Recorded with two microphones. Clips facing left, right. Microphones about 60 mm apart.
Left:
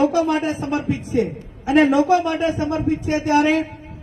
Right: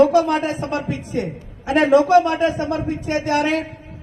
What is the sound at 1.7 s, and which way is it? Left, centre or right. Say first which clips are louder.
Speech: right 1 dB; right.